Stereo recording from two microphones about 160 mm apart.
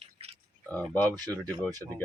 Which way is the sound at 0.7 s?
10° left (ahead or behind).